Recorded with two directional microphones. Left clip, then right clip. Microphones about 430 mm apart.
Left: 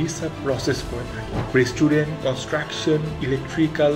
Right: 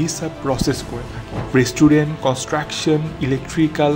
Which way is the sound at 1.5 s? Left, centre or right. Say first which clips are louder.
Right 5 dB; right.